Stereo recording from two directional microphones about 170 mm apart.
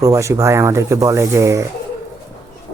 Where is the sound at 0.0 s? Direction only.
15° right (ahead or behind).